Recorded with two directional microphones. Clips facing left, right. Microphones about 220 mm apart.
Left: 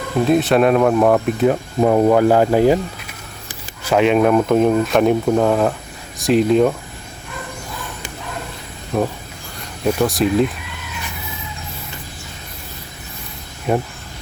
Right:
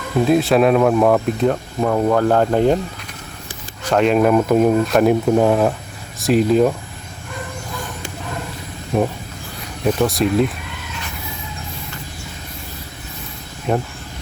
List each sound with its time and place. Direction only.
0.3 s speech: centre (ahead or behind)
1.8 s speech: 20° left (ahead or behind); by 2.7 s 5° left (ahead or behind)
3.8 s speech: 5° left (ahead or behind)
9.9 s speech: centre (ahead or behind)
13.7 s speech: 5° left (ahead or behind)